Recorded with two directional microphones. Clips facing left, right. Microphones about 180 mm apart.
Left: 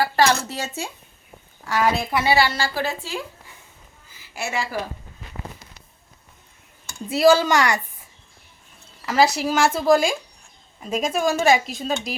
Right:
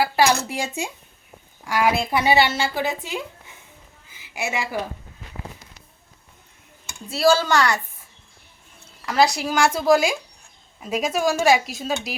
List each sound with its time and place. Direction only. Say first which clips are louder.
0.0 s a woman's voice: even; 10° right (ahead or behind)
7.1 s speech: left 2 dB; 15° left (ahead or behind)
9.0 s a woman's voice: left 1 dB; 5° left (ahead or behind)